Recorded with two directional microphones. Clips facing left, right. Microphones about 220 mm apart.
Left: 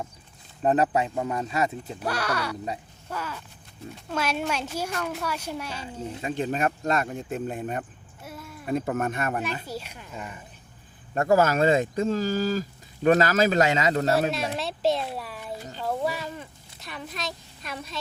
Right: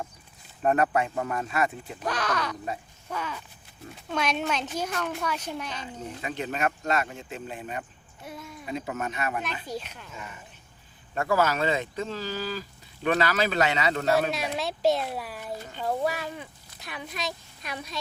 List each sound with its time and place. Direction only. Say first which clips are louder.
0.6 s speech: left 1 dB; 20° left (ahead or behind)
2.0 s a woman's voice: even; 10° left (ahead or behind)
6.0 s speech: left 5 dB; 35° left (ahead or behind)
8.2 s a sound: even; 5° left (ahead or behind)
8.6 s speech: left 6 dB; 50° left (ahead or behind)
9.6 s a woman's voice: even; 10° left (ahead or behind)
11.1 s speech: left 4 dB; 40° left (ahead or behind)
14.3 s speech: left 1 dB; centre (ahead or behind)